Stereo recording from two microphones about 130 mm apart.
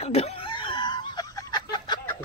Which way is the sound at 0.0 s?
55° left (ahead or behind).